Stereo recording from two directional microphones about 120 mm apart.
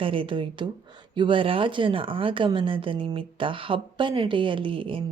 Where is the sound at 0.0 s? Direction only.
45° right (ahead or behind).